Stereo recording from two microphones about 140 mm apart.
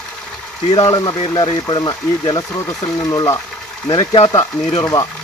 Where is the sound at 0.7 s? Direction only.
25° left (ahead or behind).